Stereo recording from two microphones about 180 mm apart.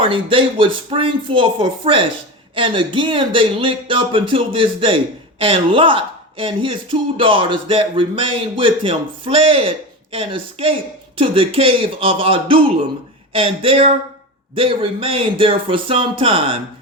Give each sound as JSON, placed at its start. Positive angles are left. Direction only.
{"t": 0.0, "sound": "a man's voice", "side_deg": -30}